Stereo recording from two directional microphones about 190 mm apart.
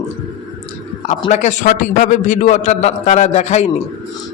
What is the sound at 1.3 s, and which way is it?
A man's voice, 40° left (ahead or behind).